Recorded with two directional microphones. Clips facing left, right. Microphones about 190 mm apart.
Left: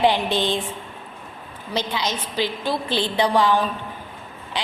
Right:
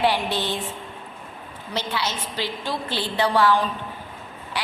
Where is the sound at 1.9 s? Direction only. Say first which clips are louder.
Left 1 dB; 15° left (ahead or behind).